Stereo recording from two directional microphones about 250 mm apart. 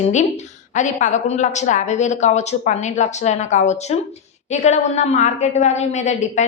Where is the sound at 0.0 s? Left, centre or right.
Left.